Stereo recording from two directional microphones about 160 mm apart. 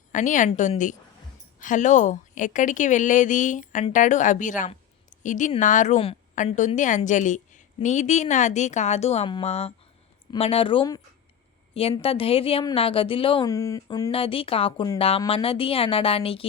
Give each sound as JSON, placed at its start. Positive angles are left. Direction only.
{"t": 0.1, "sound": "a woman's voice", "side_deg": 50}
{"t": 13.5, "sound": "speech", "side_deg": 20}
{"t": 14.1, "sound": "a woman's voice", "side_deg": 35}